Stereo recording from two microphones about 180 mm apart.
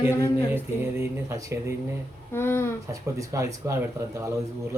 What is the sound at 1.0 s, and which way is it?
Speech, 15° right (ahead or behind).